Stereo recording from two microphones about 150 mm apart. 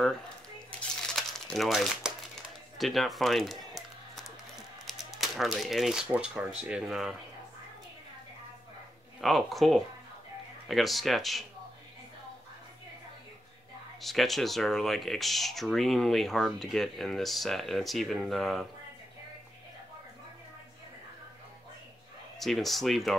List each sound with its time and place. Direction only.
0.7 s crumpling: 5° left (ahead or behind)
2.8 s music: centre (ahead or behind)
9.2 s speech: centre (ahead or behind)
14.0 s speech: centre (ahead or behind)
22.4 s speech: centre (ahead or behind)